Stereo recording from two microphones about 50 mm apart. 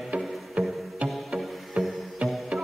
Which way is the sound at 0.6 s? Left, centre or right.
Right.